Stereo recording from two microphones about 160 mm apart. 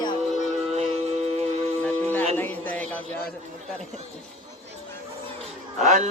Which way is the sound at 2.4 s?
10° left (ahead or behind).